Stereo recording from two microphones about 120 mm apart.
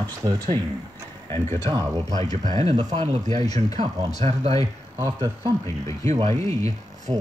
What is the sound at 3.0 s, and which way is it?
Speech, 70° right (ahead or behind).